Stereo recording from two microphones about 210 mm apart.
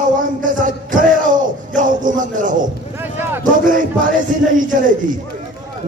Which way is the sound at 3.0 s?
10° right (ahead or behind).